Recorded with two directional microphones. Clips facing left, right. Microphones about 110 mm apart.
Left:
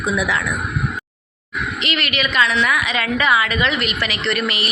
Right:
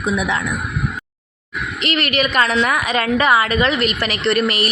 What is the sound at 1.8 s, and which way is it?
A woman's voice, 45° right (ahead or behind).